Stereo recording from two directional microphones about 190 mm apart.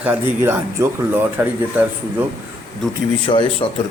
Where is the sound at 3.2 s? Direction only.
25° left (ahead or behind).